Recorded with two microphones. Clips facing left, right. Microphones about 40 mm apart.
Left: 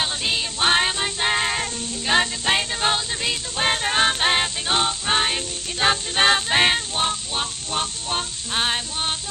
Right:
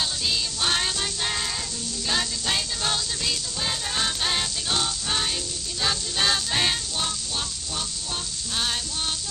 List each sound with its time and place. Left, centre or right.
0.0 s music: left
3.6 s music: left